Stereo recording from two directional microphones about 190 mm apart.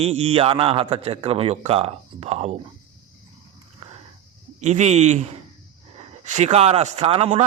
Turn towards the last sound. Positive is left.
turn(degrees=-30)  # may be behind; listen again after turning